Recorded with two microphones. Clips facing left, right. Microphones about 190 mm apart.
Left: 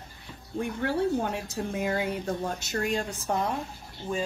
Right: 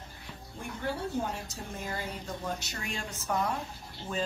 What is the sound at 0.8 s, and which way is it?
A woman's voice, 70° left (ahead or behind).